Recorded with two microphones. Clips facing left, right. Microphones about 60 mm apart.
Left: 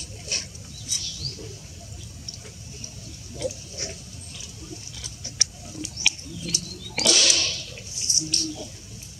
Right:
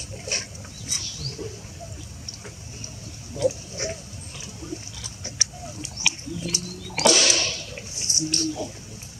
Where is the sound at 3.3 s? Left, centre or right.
Right.